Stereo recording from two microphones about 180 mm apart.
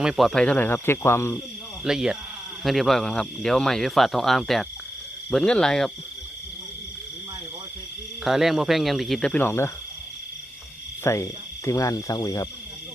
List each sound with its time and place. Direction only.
0.0 s speech: centre (ahead or behind); by 1.4 s 15° left (ahead or behind)
1.8 s speech: centre (ahead or behind)
8.2 s speech: centre (ahead or behind)
11.0 s speech: 15° left (ahead or behind)